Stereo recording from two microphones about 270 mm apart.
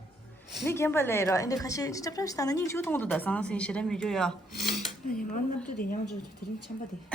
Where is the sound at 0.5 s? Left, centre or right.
Centre.